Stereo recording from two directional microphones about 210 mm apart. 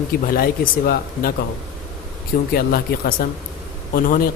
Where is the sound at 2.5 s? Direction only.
45° left (ahead or behind).